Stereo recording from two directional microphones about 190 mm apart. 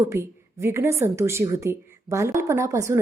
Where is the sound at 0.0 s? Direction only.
15° right (ahead or behind).